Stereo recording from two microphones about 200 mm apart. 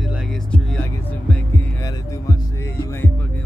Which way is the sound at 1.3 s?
15° left (ahead or behind).